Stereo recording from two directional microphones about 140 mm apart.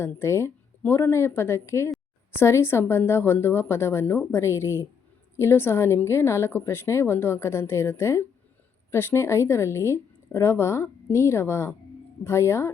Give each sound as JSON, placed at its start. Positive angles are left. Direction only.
{"t": 0.0, "sound": "a woman's voice", "side_deg": 20}